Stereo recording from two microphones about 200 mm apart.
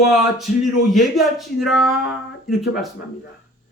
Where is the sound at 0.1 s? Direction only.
Centre (ahead or behind).